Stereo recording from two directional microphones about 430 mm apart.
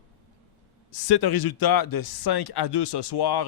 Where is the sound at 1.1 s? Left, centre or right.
Left.